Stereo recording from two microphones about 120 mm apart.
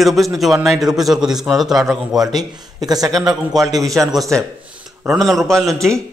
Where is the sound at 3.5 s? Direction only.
30° right (ahead or behind).